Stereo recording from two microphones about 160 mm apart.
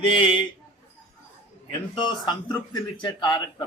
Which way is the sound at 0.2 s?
35° left (ahead or behind).